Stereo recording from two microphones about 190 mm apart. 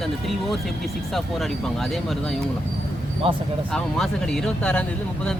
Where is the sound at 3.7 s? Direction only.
Centre (ahead or behind).